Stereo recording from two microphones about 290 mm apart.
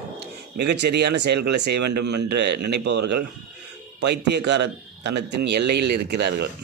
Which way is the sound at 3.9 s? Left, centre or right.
Right.